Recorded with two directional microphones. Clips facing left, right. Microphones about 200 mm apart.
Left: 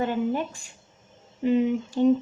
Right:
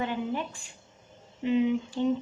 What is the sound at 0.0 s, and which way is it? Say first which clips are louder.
Speech: left 5 dB; 45° left (ahead or behind).